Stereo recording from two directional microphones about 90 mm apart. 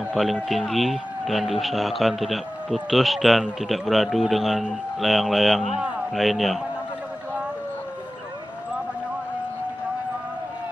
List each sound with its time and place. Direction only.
0.1 s speech: centre (ahead or behind)